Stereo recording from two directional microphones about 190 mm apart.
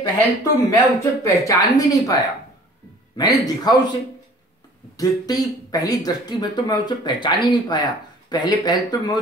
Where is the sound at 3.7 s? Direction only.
20° left (ahead or behind).